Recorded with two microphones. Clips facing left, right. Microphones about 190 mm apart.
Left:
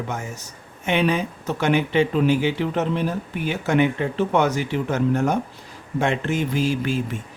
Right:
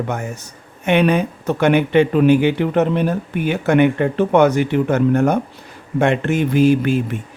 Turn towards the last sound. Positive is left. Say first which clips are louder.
# right 8 dB
turn(degrees=-60)  # may be behind; listen again after turning